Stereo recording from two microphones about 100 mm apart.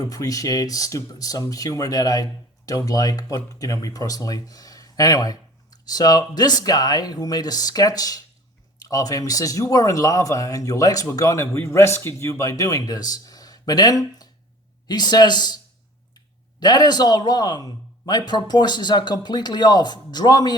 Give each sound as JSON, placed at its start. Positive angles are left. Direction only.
{"t": 0.0, "sound": "a man's voice", "side_deg": 35}
{"t": 16.6, "sound": "a man's voice", "side_deg": 45}